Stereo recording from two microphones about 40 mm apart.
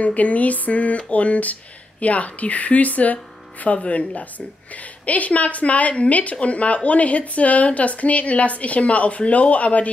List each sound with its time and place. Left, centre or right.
0.0 s a woman's voice: left